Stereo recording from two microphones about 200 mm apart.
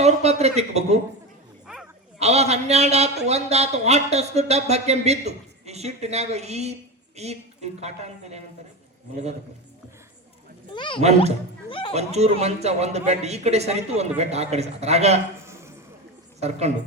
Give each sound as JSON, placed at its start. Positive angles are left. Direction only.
{"t": 0.0, "sound": "speech", "side_deg": -30}
{"t": 2.1, "sound": "speech", "side_deg": -30}
{"t": 10.8, "sound": "speech", "side_deg": 25}
{"t": 11.0, "sound": "speech", "side_deg": -35}
{"t": 11.7, "sound": "speech", "side_deg": 25}
{"t": 11.9, "sound": "speech", "side_deg": -35}
{"t": 15.4, "sound": "a sound", "side_deg": -15}
{"t": 16.4, "sound": "speech", "side_deg": -35}